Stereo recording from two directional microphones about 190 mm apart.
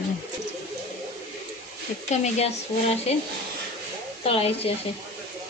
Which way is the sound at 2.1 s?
35° left (ahead or behind).